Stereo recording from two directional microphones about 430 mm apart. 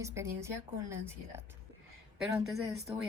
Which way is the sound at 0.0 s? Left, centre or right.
Centre.